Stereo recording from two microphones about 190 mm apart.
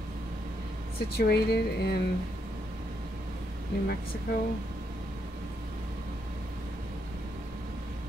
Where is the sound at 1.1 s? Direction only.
55° left (ahead or behind).